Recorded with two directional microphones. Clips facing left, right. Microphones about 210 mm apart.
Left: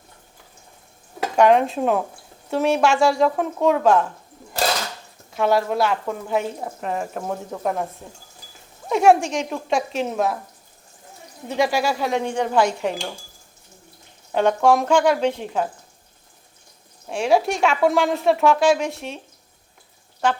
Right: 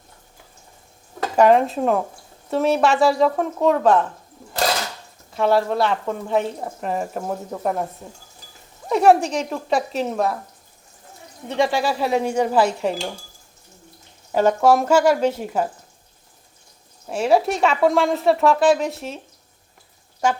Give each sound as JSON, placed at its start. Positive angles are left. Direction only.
{"t": 1.4, "sound": "speech", "side_deg": 0}
{"t": 5.3, "sound": "speech", "side_deg": 0}
{"t": 8.9, "sound": "speech", "side_deg": 0}
{"t": 11.4, "sound": "speech", "side_deg": 0}
{"t": 14.3, "sound": "speech", "side_deg": -5}
{"t": 17.1, "sound": "speech", "side_deg": 0}